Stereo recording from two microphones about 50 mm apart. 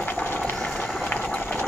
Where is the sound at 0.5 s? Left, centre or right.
Centre.